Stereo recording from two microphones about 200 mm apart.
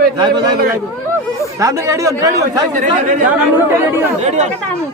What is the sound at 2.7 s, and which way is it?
Speech, 40° right (ahead or behind).